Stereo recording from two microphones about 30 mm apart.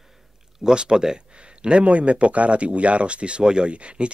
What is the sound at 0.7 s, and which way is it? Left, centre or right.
Speech, right.